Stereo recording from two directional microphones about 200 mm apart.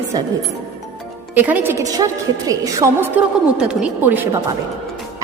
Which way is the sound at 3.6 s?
5° right (ahead or behind).